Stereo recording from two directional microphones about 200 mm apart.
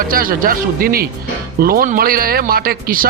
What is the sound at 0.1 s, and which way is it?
Speech, 45° right (ahead or behind).